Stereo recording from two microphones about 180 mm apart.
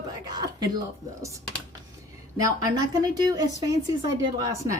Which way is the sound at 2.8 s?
20° right (ahead or behind).